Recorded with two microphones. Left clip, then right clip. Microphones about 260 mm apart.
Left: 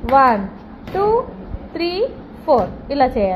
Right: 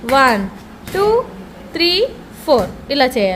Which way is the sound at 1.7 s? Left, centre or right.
Centre.